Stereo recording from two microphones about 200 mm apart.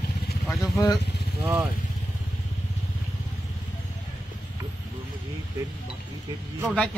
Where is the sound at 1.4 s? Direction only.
5° right (ahead or behind).